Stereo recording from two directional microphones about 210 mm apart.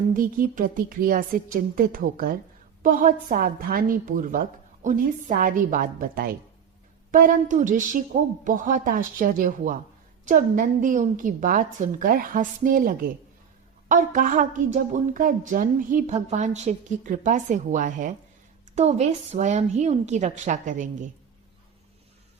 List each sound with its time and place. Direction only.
0.1 s a woman's voice: 40° right (ahead or behind)